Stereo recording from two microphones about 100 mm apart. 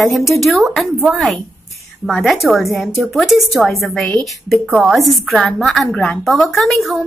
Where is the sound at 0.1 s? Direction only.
Centre (ahead or behind).